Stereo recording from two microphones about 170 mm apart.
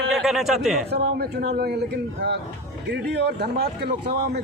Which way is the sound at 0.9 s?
65° right (ahead or behind).